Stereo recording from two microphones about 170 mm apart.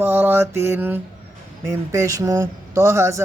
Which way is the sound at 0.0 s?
10° right (ahead or behind).